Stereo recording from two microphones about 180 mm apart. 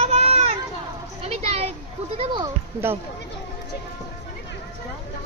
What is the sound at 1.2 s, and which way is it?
Children playing, 35° right (ahead or behind).